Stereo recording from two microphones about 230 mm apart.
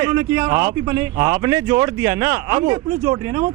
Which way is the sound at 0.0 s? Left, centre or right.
Centre.